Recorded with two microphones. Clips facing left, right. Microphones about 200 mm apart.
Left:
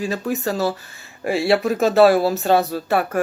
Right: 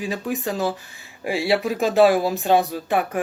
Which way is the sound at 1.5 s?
50° left (ahead or behind).